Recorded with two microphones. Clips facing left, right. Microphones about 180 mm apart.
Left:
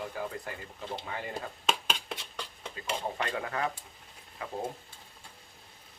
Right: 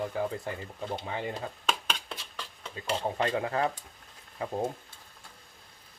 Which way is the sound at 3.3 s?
25° right (ahead or behind).